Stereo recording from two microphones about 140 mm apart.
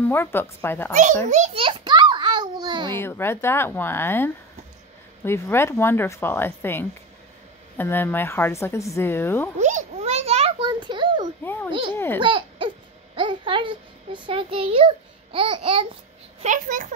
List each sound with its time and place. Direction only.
0.0 s a woman's voice: 15° left (ahead or behind)
1.3 s a child's voice: 55° right (ahead or behind)
1.6 s a sound: 35° right (ahead or behind)
3.0 s a woman's voice: 15° left (ahead or behind)
9.6 s a sound: 60° right (ahead or behind)
10.6 s a sound: 35° right (ahead or behind)
11.9 s a woman's voice: 15° left (ahead or behind)
12.2 s speech: 35° right (ahead or behind)
16.4 s speech: 70° right (ahead or behind)